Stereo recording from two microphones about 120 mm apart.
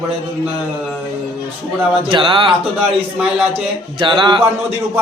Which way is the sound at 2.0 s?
45° right (ahead or behind).